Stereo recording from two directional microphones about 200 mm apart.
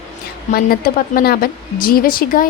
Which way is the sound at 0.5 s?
45° left (ahead or behind).